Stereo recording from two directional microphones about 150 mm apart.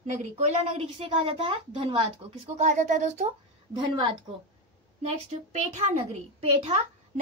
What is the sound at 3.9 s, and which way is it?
Speech, 30° right (ahead or behind).